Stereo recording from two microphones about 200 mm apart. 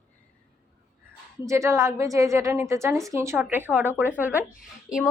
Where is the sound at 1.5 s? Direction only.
15° right (ahead or behind).